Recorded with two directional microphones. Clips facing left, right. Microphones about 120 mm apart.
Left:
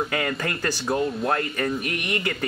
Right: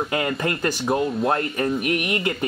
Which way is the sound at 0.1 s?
25° right (ahead or behind).